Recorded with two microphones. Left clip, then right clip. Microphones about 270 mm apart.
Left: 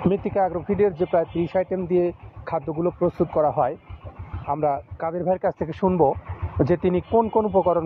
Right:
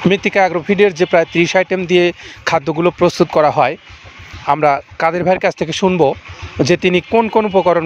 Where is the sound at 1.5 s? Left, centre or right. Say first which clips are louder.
Right 9 dB; right.